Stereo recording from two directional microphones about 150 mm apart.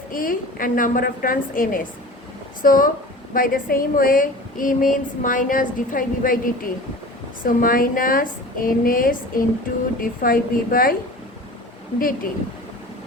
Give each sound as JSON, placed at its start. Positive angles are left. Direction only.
{"t": 0.1, "sound": "a woman's voice", "side_deg": 70}
{"t": 7.4, "sound": "a woman's voice", "side_deg": 70}
{"t": 11.9, "sound": "a woman's voice", "side_deg": 75}